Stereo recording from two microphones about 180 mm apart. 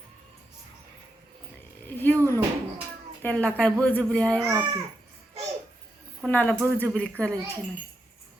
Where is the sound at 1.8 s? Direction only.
10° left (ahead or behind).